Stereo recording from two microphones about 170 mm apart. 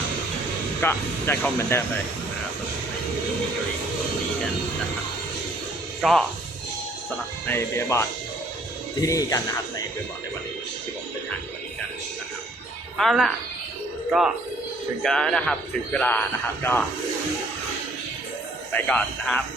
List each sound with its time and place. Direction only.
0.8 s speech: 10° left (ahead or behind)
6.0 s speech: centre (ahead or behind)
7.4 s speech: 15° left (ahead or behind)
13.0 s speech: centre (ahead or behind)
18.7 s speech: 10° left (ahead or behind)